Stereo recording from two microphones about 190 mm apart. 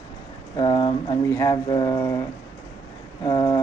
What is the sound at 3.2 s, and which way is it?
Speech, 25° left (ahead or behind).